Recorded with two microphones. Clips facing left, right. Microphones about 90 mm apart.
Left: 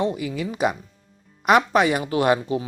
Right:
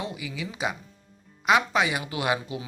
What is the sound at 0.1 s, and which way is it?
Speech, 50° left (ahead or behind).